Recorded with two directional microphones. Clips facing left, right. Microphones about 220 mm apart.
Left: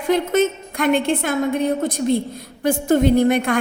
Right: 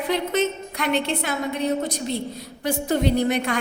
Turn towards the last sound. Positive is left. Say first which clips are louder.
# left 6 dB
turn(degrees=50)  # may be behind; listen again after turning